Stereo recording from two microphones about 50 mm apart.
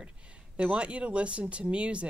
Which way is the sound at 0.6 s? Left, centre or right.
Right.